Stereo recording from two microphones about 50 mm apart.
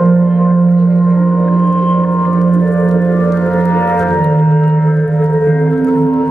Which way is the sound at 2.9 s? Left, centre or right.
Left.